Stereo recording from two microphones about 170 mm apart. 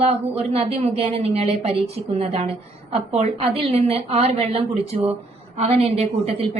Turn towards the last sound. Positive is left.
turn(degrees=-35)  # may be behind; listen again after turning